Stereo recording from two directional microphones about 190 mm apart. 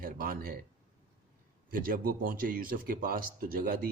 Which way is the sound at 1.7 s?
50° right (ahead or behind).